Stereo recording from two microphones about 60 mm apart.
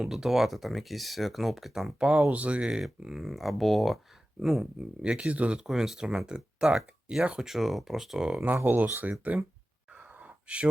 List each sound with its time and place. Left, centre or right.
0.0 s speech: centre
2.8 s speech: centre
5.0 s speech: centre
8.6 s speech: right
9.9 s gasp: right